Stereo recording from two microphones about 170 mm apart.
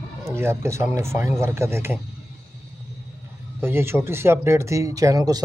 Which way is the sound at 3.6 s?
15° right (ahead or behind).